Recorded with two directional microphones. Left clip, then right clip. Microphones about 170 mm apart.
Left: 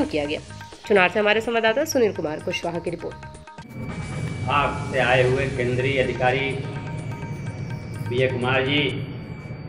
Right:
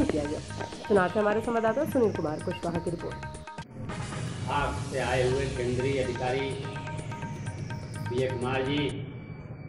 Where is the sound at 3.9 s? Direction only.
Centre (ahead or behind).